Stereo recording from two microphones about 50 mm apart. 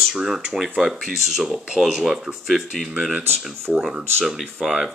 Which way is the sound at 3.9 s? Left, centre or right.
Centre.